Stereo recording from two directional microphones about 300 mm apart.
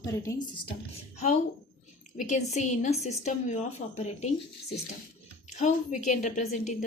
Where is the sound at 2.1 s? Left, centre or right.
Left.